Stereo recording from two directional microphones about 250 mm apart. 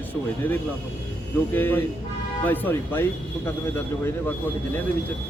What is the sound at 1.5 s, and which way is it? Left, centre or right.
A man's voice, centre.